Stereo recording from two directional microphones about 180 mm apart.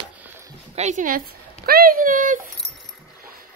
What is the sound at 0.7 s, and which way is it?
Speech, 45° right (ahead or behind).